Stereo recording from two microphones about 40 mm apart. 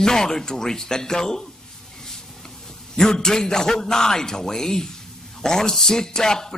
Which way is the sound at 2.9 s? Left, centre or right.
Centre.